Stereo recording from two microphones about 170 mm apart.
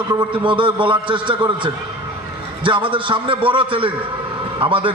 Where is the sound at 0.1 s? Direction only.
25° right (ahead or behind).